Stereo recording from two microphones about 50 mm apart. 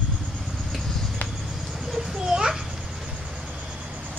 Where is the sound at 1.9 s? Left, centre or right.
Centre.